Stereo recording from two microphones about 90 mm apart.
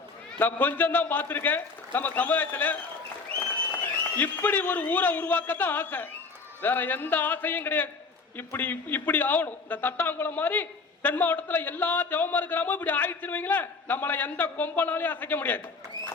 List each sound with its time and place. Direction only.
0.3 s a man's voice: 20° left (ahead or behind)
4.0 s a man's voice: 20° left (ahead or behind)